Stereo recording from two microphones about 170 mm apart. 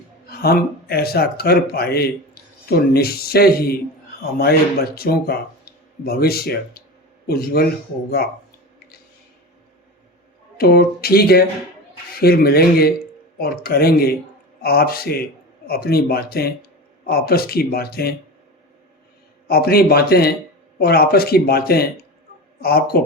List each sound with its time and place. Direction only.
0.3 s speech: 65° left (ahead or behind)
4.9 s speech: 65° left (ahead or behind)
10.6 s speech: 65° left (ahead or behind)
19.5 s speech: 65° left (ahead or behind)